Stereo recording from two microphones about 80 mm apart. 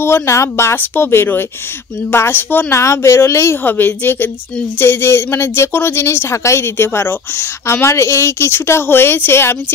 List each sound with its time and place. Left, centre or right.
0.0 s a woman's voice: left
3.6 s a woman's voice: left